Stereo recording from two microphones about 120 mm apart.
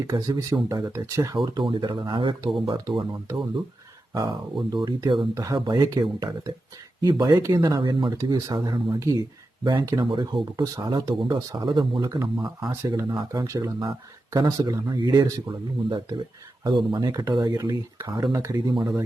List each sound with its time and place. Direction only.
0.1 s speech: 30° right (ahead or behind)
1.5 s speech: 45° right (ahead or behind)
7.8 s speech: 45° right (ahead or behind)
8.1 s speech: 30° right (ahead or behind)
8.5 s speech: 40° right (ahead or behind)